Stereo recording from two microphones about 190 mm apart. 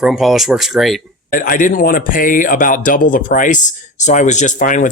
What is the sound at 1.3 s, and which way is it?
Speech, 45° left (ahead or behind).